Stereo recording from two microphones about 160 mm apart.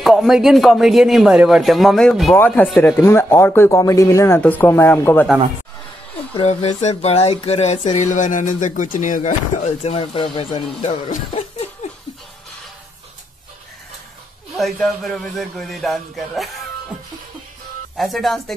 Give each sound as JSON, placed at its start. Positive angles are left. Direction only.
{"t": 0.0, "sound": "speech", "side_deg": 0}
{"t": 6.3, "sound": "a sound", "side_deg": 40}
{"t": 11.1, "sound": "speech", "side_deg": 40}
{"t": 14.6, "sound": "speech", "side_deg": 0}
{"t": 17.9, "sound": "speech", "side_deg": 0}